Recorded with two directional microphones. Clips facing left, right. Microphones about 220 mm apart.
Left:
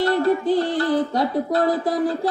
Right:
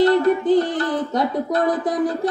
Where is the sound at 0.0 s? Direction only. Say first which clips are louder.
Right 3 dB; 20° right (ahead or behind).